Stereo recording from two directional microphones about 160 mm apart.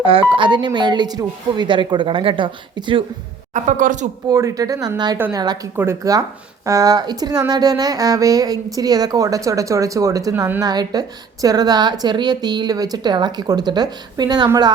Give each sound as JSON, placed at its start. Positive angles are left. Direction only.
{"t": 0.0, "sound": "speech", "side_deg": -35}
{"t": 3.5, "sound": "speech", "side_deg": -50}
{"t": 4.3, "sound": "speech", "side_deg": -20}
{"t": 5.1, "sound": "a woman's voice", "side_deg": -15}